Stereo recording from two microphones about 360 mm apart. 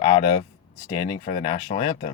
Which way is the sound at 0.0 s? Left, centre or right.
Centre.